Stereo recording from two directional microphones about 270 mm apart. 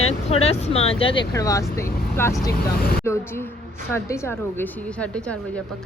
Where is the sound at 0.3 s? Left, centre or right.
Left.